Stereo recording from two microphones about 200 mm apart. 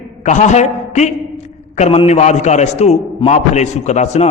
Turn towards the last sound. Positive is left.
turn(degrees=35)  # may be behind; listen again after turning